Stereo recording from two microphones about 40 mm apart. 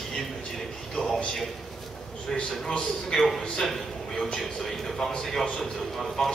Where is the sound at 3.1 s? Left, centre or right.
Centre.